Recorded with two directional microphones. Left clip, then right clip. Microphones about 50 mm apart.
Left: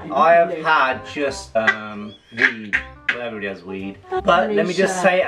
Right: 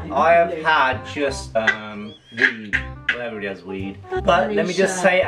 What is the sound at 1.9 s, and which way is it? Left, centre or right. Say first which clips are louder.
Speech: even; centre.